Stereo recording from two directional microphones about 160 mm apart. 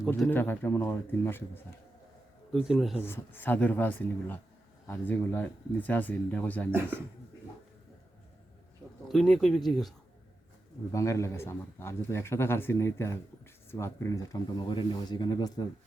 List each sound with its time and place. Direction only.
0.3 s speech: 10° left (ahead or behind)
2.6 s speech: 5° right (ahead or behind)
3.0 s speech: 15° left (ahead or behind)
9.0 s speech: 5° left (ahead or behind)
10.9 s speech: 20° left (ahead or behind)